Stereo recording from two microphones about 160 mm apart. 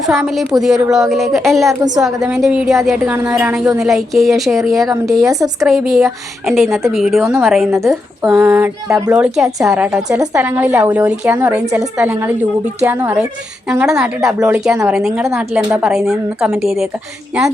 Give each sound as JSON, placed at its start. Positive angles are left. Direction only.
{"t": 0.0, "sound": "a woman's voice", "side_deg": 0}
{"t": 5.3, "sound": "a woman's voice", "side_deg": -20}
{"t": 5.6, "sound": "a woman's voice", "side_deg": 0}
{"t": 7.3, "sound": "speech", "side_deg": -15}
{"t": 7.5, "sound": "a woman's voice", "side_deg": 0}
{"t": 7.8, "sound": "a woman's voice", "side_deg": -20}